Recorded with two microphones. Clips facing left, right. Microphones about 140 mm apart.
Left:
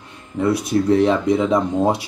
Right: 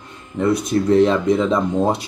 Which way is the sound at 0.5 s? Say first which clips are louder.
Even; 10° left (ahead or behind).